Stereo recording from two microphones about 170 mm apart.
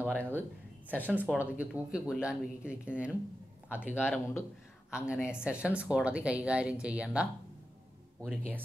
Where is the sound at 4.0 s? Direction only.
10° left (ahead or behind).